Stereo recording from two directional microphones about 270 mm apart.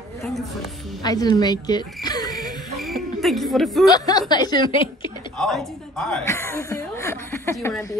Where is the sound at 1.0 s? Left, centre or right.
Centre.